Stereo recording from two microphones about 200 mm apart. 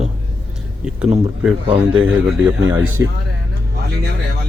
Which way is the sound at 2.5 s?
10° right (ahead or behind).